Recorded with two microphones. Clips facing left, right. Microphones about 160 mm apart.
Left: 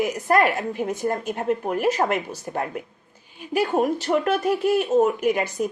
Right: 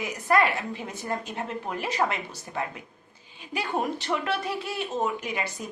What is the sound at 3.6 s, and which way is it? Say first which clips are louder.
Speech: left 8 dB; 45° left (ahead or behind).